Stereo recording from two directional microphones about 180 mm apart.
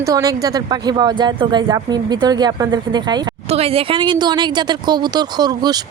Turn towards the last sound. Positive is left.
turn(degrees=-20)  # may be behind; listen again after turning